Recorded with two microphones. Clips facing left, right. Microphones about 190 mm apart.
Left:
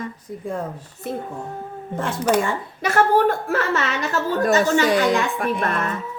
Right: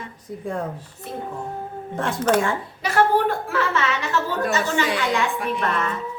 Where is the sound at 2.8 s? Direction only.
45° left (ahead or behind).